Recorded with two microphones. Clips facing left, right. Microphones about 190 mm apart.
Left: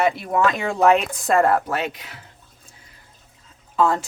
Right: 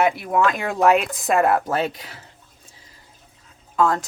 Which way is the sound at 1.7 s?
35° right (ahead or behind).